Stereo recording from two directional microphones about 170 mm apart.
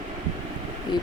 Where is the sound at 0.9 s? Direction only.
25° left (ahead or behind).